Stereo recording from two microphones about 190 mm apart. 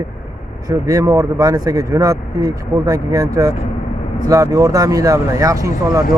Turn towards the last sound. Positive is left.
turn(degrees=-20)  # may be behind; listen again after turning